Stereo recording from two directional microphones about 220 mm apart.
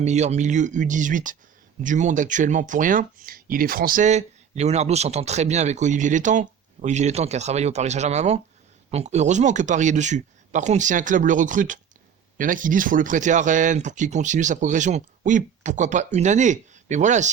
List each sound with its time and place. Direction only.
0.0 s speech: 30° right (ahead or behind)